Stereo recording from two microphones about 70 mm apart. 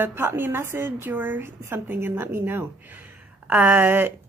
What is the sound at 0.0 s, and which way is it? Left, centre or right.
Speech, right.